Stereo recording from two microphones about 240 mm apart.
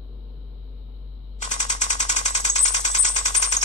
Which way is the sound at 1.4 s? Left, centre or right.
Left.